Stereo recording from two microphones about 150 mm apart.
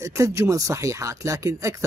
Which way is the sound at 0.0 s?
20° right (ahead or behind).